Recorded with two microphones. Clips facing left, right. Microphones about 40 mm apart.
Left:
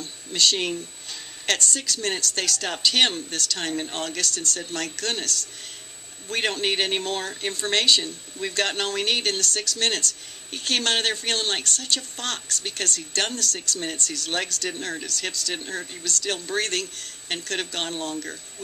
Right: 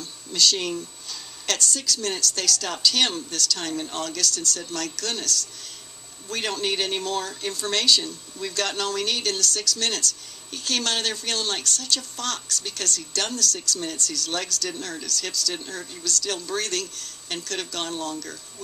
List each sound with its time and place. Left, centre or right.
0.0 s a man's voice: left